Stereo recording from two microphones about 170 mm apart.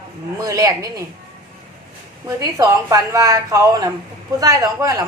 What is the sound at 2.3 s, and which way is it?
A woman's voice, 20° right (ahead or behind).